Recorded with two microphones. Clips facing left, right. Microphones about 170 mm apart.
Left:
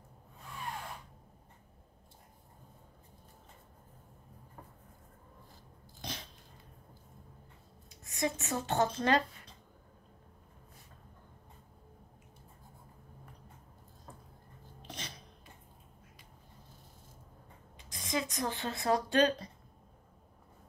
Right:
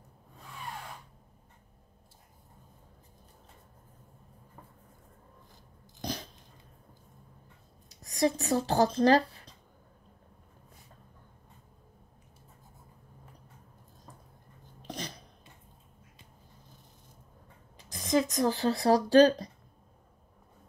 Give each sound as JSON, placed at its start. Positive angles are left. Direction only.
{"t": 5.9, "sound": "dog", "side_deg": -40}
{"t": 8.0, "sound": "speech", "side_deg": -35}
{"t": 14.8, "sound": "a sound", "side_deg": -40}
{"t": 17.9, "sound": "speech", "side_deg": -40}